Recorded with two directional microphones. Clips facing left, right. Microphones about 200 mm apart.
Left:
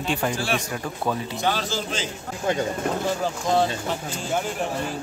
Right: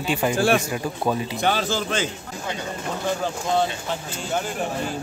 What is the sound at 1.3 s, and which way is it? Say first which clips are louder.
Speech: right 2 dB; 55° right (ahead or behind).